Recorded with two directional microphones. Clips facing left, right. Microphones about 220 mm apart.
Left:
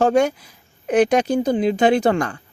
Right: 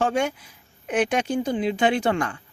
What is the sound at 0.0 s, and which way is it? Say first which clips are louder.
Speech: left 7 dB; 40° left (ahead or behind).